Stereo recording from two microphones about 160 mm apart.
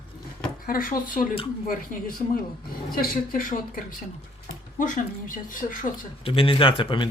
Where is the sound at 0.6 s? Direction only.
65° left (ahead or behind).